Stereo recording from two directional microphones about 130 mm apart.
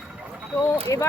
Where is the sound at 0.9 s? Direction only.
25° left (ahead or behind).